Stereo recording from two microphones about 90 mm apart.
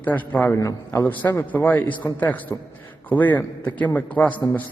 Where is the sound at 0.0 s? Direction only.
20° left (ahead or behind).